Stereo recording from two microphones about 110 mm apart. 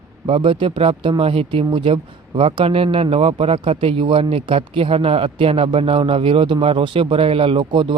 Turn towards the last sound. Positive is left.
turn(degrees=-50)  # may be behind; listen again after turning